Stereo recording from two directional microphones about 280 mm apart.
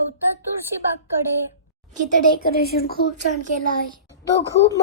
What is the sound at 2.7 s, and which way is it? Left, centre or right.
Speech, left.